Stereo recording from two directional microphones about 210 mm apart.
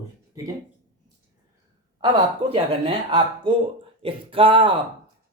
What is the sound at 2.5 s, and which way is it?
Speech, 25° right (ahead or behind).